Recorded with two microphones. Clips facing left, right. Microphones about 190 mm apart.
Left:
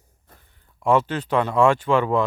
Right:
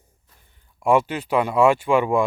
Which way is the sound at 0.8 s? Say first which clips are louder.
Right 1 dB; 10° right (ahead or behind).